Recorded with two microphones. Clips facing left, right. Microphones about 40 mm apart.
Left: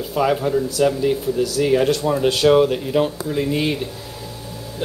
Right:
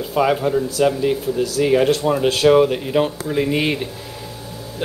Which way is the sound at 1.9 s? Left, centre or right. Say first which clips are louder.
Right 1 dB; right.